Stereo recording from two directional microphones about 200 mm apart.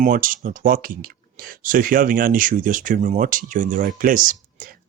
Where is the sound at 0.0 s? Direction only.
45° right (ahead or behind).